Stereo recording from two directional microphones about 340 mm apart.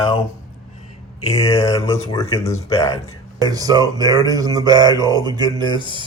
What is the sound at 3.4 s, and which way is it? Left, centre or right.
Speech, centre.